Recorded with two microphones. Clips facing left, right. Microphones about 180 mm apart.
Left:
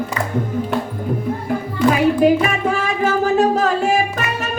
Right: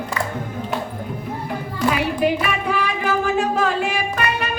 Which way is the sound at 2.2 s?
45° left (ahead or behind).